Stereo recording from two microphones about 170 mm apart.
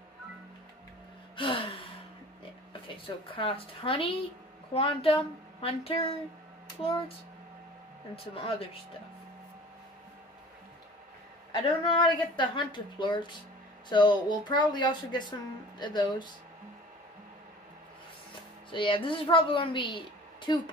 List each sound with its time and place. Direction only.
1.3 s gasp: 30° left (ahead or behind)
2.9 s speech: 30° left (ahead or behind)
8.4 s speech: 35° left (ahead or behind)
11.5 s a woman's voice: 30° left (ahead or behind)
18.7 s a woman's voice: 30° left (ahead or behind)